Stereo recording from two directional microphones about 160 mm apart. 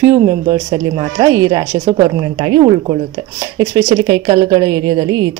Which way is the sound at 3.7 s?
25° right (ahead or behind).